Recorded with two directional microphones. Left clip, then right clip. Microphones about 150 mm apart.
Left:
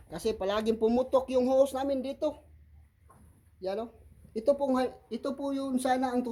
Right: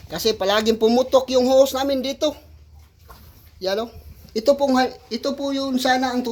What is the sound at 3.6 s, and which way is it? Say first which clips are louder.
Speech: right 11 dB; centre (ahead or behind).